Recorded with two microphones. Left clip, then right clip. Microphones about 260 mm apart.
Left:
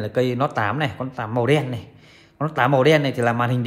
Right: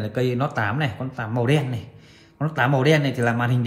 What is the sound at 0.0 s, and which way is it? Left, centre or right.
A man's voice, left.